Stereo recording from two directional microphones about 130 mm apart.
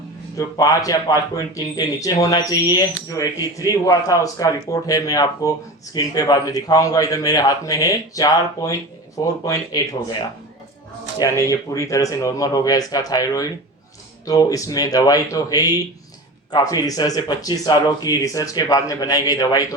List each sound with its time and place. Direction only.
0.3 s speech: 30° left (ahead or behind)
11.2 s speech: 25° left (ahead or behind)